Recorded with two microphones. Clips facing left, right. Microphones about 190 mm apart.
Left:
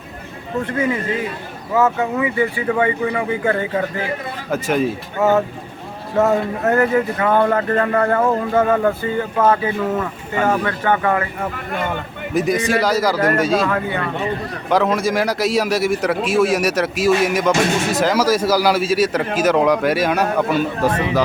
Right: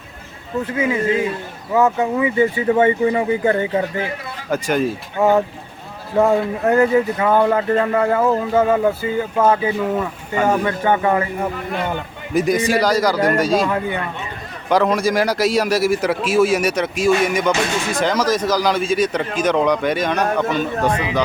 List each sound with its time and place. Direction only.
1.7 s speech: 15° right (ahead or behind)
4.5 s a man's voice: centre (ahead or behind)
5.2 s speech: 15° right (ahead or behind)
12.3 s a man's voice: centre (ahead or behind)
13.7 s speech: 15° right (ahead or behind)
14.7 s a man's voice: centre (ahead or behind)